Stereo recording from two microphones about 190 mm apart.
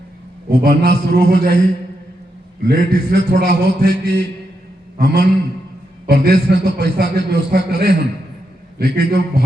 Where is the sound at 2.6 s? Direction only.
60° right (ahead or behind).